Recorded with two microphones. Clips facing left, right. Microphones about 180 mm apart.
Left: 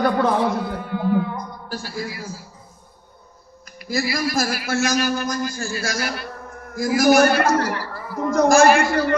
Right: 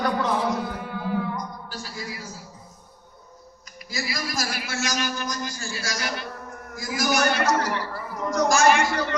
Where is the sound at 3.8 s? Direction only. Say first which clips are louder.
Left 8 dB; 55° left (ahead or behind).